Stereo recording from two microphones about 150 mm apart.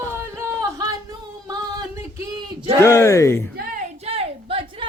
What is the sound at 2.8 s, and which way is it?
Speech, 20° left (ahead or behind).